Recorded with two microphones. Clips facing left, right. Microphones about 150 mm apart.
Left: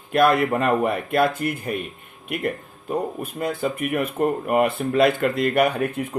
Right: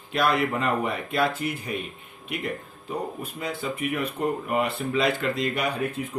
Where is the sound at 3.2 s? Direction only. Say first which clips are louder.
Left 6 dB; 50° left (ahead or behind).